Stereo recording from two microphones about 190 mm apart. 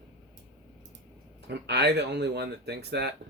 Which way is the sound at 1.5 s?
60° right (ahead or behind).